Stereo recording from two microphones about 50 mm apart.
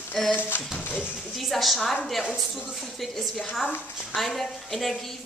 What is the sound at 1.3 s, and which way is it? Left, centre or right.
A woman's voice, centre.